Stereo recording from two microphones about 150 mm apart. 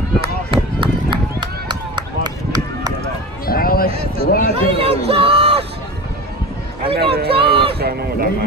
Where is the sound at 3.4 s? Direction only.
80° left.